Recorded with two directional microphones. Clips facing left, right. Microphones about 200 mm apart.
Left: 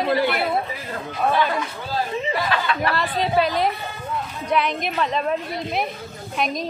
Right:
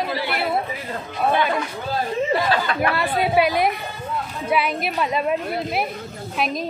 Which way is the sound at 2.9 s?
10° right (ahead or behind).